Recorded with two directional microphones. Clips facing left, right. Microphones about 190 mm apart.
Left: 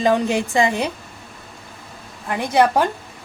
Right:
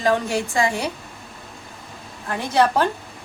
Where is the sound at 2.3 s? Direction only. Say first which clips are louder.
Left 2 dB; 15° left (ahead or behind).